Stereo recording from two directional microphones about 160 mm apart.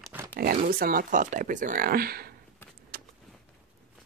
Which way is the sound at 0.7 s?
65° right (ahead or behind).